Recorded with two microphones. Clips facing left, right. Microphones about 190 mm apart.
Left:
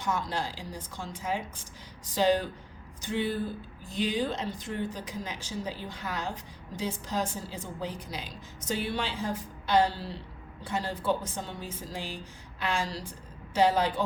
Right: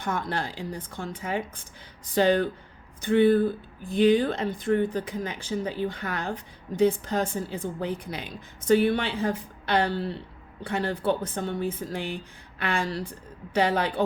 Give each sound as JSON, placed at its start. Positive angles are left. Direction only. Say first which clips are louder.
{"t": 0.0, "sound": "speech", "louder": "right 2 dB", "side_deg": -55}